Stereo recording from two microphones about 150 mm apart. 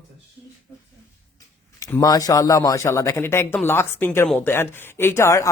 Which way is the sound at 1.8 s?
25° left (ahead or behind).